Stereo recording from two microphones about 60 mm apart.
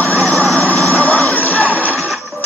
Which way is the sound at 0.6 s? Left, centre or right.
Left.